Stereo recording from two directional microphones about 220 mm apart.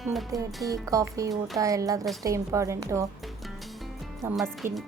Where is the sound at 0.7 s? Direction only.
15° right (ahead or behind).